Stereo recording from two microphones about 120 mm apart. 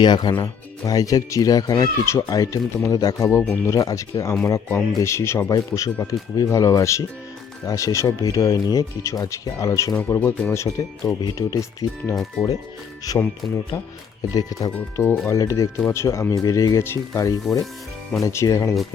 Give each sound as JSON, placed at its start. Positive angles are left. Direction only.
{"t": 0.0, "sound": "speech", "side_deg": 40}
{"t": 3.2, "sound": "speech", "side_deg": 15}
{"t": 3.7, "sound": "speech", "side_deg": 30}
{"t": 13.4, "sound": "speech", "side_deg": 0}
{"t": 14.2, "sound": "speech", "side_deg": 30}
{"t": 14.7, "sound": "speech", "side_deg": 15}